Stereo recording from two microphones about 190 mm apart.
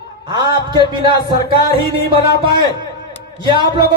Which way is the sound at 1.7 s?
60° left (ahead or behind).